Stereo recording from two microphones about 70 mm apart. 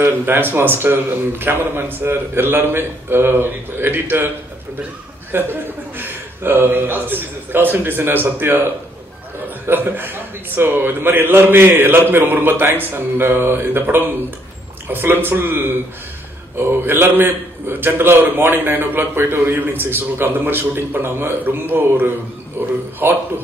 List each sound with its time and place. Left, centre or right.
0.0 s a man's voice: right
5.3 s a man's voice: right
9.7 s a man's voice: right